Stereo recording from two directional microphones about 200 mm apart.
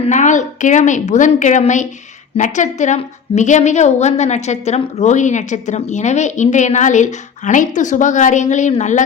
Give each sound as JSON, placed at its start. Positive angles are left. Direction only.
{"t": 0.1, "sound": "a woman's voice", "side_deg": 40}